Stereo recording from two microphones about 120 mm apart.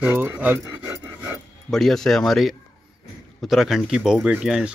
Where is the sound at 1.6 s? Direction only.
5° left (ahead or behind).